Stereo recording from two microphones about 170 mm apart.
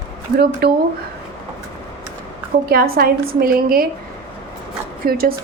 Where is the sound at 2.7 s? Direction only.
60° right (ahead or behind).